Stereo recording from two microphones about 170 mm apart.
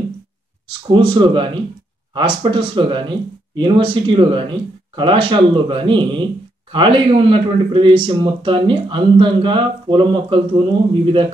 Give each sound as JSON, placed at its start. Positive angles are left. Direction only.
{"t": 0.8, "sound": "speech", "side_deg": -30}